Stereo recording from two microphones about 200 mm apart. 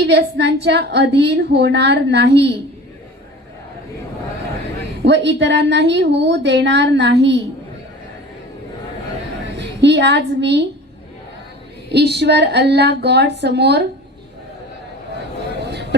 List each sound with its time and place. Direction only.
0.1 s a woman's voice: 60° right (ahead or behind)
5.0 s a woman's voice: 60° right (ahead or behind)
9.6 s a woman's voice: 60° right (ahead or behind)
11.9 s a woman's voice: 55° right (ahead or behind)
15.6 s a sound: 55° right (ahead or behind)